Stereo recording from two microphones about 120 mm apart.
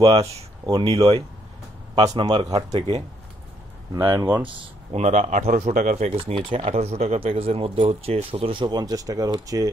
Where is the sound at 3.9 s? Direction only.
25° right (ahead or behind).